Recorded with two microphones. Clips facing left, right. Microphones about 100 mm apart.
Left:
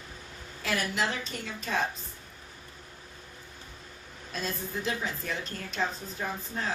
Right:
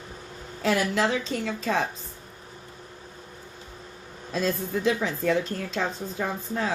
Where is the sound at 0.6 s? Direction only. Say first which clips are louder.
Right 7 dB; 90° right.